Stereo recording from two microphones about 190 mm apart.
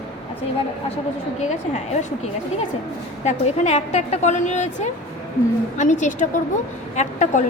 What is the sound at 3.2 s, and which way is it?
A woman's voice, 35° left (ahead or behind).